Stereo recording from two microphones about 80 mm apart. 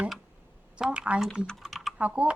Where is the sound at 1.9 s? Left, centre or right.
Centre.